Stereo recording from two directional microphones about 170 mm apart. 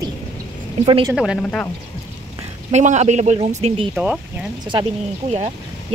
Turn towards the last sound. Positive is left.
turn(degrees=-40)  # may be behind; listen again after turning